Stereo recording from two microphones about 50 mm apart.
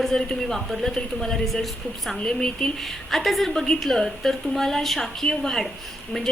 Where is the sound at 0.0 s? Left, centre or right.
Centre.